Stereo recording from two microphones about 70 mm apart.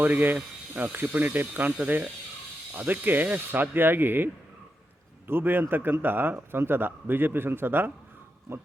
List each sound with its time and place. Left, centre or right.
0.0 s speech: right
5.3 s speech: right